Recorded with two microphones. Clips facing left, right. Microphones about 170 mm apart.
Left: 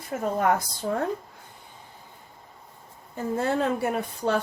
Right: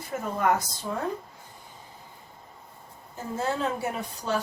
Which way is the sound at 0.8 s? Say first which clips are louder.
Left 6 dB; 50° left (ahead or behind).